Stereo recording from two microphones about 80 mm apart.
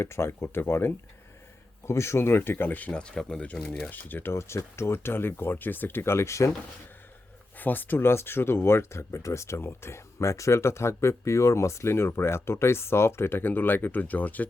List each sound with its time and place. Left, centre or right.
0.0 s speech: left
7.6 s speech: left